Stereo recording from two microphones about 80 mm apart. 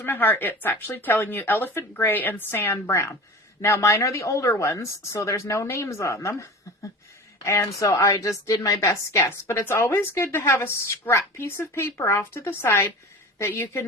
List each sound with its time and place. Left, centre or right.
0.0 s a woman's voice: left